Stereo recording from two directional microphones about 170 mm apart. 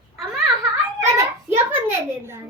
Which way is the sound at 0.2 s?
Centre (ahead or behind).